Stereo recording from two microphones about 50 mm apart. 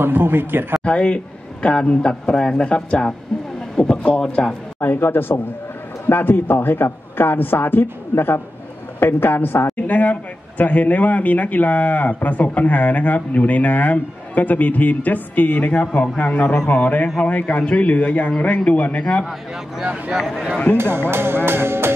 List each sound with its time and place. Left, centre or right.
0.0 s speech: right
0.8 s a man's voice: left
4.7 s a man's voice: left
9.0 s a man's voice: left
9.8 s a man's voice: left
19.8 s speech: centre
20.7 s speech: right